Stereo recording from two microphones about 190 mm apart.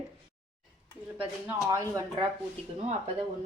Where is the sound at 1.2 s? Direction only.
10° right (ahead or behind).